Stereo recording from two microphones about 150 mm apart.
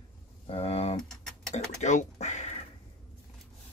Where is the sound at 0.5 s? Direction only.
40° left (ahead or behind).